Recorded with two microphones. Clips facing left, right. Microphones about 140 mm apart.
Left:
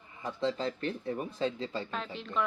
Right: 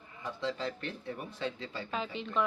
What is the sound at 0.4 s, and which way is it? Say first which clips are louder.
Speech: left 4 dB; 35° left (ahead or behind).